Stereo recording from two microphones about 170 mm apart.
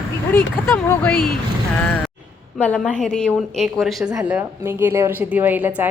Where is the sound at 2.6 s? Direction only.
5° left (ahead or behind).